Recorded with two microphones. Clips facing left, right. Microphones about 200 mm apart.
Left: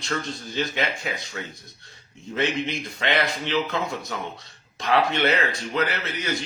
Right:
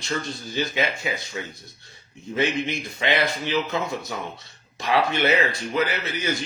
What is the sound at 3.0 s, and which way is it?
Speech, centre (ahead or behind).